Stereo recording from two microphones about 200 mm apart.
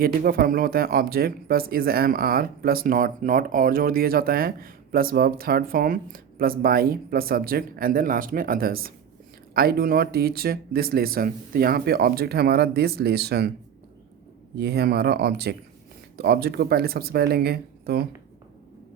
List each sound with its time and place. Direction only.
0.0 s speech: 45° right (ahead or behind)
14.5 s speech: 55° right (ahead or behind)